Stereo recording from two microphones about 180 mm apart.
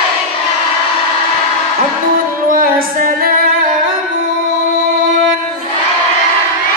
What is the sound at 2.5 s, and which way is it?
Music, 50° right (ahead or behind).